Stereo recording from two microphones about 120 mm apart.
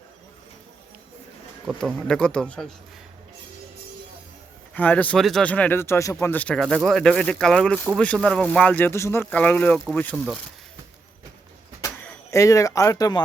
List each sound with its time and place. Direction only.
2.0 s speech: 5° left (ahead or behind)
4.7 s speech: 15° left (ahead or behind)
12.3 s speech: 25° left (ahead or behind)